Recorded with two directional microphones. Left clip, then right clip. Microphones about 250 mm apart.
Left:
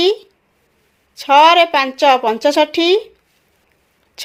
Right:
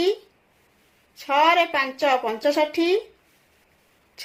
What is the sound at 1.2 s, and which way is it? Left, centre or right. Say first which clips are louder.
A woman's voice: left 9 dB; left.